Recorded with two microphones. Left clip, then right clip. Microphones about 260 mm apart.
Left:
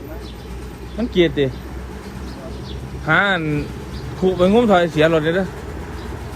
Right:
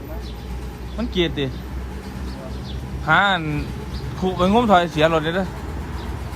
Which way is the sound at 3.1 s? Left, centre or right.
Centre.